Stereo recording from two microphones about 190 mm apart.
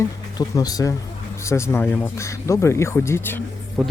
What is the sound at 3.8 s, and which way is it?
Speech, 5° right (ahead or behind).